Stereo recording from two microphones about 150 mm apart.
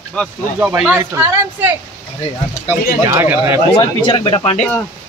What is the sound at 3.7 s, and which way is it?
Speech, 35° left (ahead or behind).